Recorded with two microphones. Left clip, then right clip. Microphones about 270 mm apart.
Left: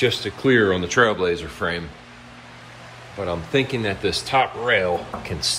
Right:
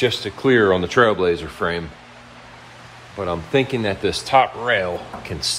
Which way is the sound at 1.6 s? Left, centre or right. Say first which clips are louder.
Right 2 dB; right.